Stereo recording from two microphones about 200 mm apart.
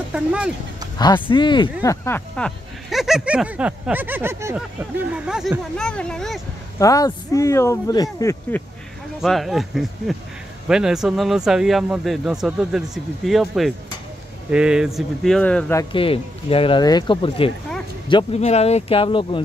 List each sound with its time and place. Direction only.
0.1 s speech: 5° right (ahead or behind)
0.9 s speech: 20° left (ahead or behind); by 6.4 s centre (ahead or behind)
6.8 s speech: 15° left (ahead or behind)
9.2 s speech: centre (ahead or behind)
15.9 s speech: 25° left (ahead or behind)